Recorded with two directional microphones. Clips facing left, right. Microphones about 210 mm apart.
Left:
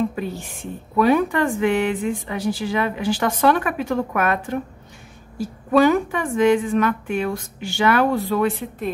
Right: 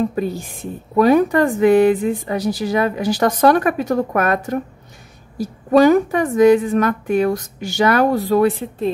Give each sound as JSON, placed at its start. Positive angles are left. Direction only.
{"t": 0.0, "sound": "a woman's voice", "side_deg": -40}
{"t": 5.7, "sound": "a woman's voice", "side_deg": -40}